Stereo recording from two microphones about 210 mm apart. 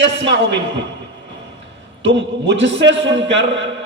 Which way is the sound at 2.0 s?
55° right (ahead or behind).